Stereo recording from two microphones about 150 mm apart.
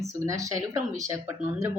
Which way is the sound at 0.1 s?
20° right (ahead or behind).